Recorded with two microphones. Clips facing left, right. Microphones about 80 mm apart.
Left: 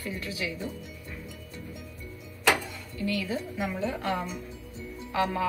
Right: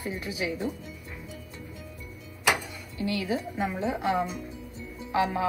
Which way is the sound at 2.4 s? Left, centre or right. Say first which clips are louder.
Left 1 dB; centre.